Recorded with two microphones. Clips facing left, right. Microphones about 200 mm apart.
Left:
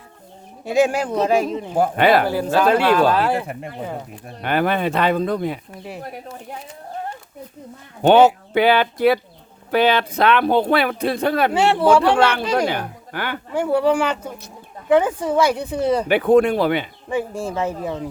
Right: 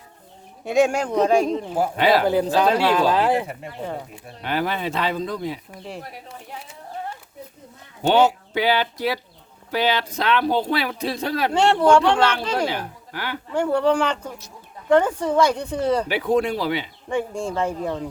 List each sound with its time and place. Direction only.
0.6 s speech: centre (ahead or behind)
1.8 s speech: 55° left (ahead or behind)
2.2 s speech: 20° right (ahead or behind)
3.4 s speech: 50° left (ahead or behind)
8.1 s speech: 55° left (ahead or behind)
11.5 s speech: 5° left (ahead or behind)
12.6 s speech: 60° left (ahead or behind)
13.5 s speech: 10° left (ahead or behind)
16.0 s speech: 55° left (ahead or behind)
17.1 s speech: 5° left (ahead or behind)